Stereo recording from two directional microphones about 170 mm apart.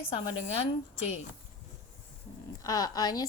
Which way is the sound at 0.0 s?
40° left (ahead or behind).